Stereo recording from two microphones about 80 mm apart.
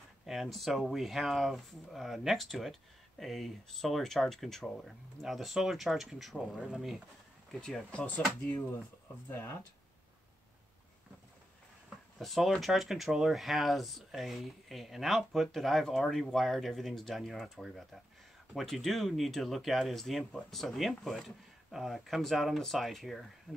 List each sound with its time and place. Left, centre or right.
0.3 s speech: centre
7.6 s speech: centre
9.3 s speech: left
12.2 s speech: centre